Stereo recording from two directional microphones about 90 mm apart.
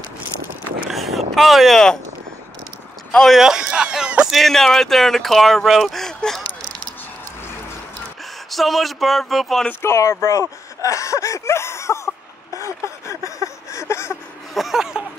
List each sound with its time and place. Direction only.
0.8 s vehicle: centre (ahead or behind)
3.1 s speech: 5° left (ahead or behind)
3.3 s speech: 5° right (ahead or behind)
4.3 s speech: 5° left (ahead or behind)
8.5 s speech: centre (ahead or behind)
9.7 s speech: 30° left (ahead or behind)
10.8 s a sound: 35° left (ahead or behind)
14.5 s a sound: centre (ahead or behind)